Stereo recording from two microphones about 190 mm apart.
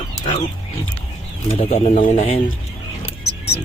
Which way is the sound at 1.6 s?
35° left (ahead or behind).